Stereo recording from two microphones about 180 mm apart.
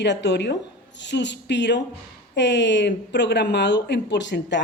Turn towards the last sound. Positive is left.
turn(degrees=80)